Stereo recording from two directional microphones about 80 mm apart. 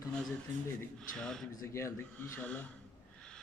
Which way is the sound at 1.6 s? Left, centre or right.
Left.